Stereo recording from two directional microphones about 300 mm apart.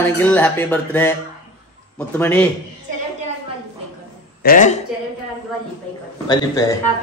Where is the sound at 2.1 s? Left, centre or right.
Centre.